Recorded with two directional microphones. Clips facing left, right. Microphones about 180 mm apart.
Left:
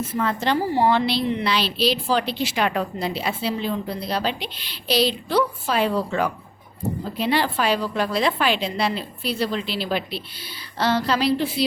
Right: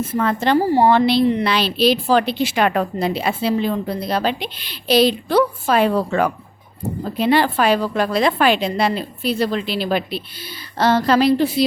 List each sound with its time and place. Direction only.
0.0 s a woman's voice: 50° right (ahead or behind)